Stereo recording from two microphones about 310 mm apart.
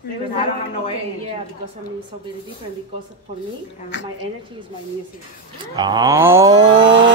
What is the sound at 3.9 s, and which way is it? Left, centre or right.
Speech, left.